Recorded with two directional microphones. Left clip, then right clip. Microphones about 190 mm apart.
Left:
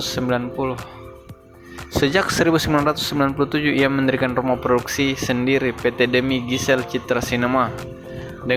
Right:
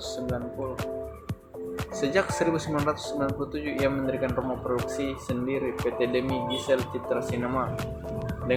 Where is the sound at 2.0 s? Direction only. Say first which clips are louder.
Left 7 dB; 30° left (ahead or behind).